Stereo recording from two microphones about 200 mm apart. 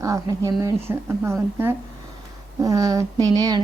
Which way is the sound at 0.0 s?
15° right (ahead or behind).